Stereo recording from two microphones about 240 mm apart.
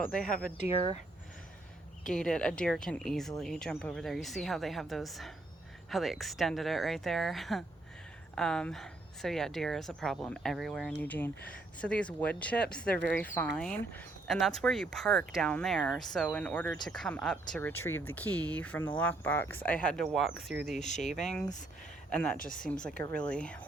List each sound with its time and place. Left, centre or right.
0.1 s speech: centre
2.1 s speech: centre
20.7 s speech: left
21.1 s speech: centre